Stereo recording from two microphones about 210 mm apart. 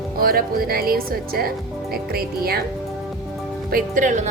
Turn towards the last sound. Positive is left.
turn(degrees=-35)  # may be behind; listen again after turning